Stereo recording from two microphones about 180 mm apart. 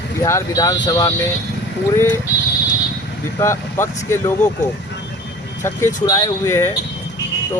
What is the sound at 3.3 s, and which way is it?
Speech, 15° left (ahead or behind).